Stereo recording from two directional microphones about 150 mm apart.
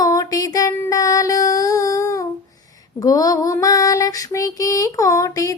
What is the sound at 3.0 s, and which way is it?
Female singing, 25° left (ahead or behind).